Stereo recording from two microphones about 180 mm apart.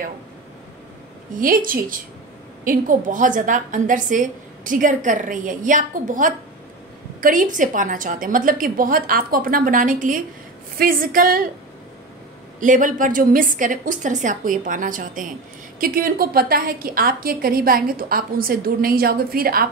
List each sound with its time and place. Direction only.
1.3 s a woman's voice: 50° right (ahead or behind)
12.5 s a woman's voice: 45° right (ahead or behind)